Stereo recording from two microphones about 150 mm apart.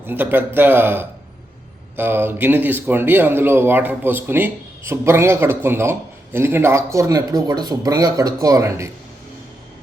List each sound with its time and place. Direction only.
0.0 s a man's voice: 15° right (ahead or behind)